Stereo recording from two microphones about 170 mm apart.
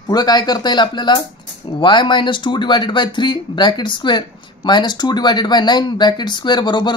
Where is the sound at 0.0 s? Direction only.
25° left (ahead or behind).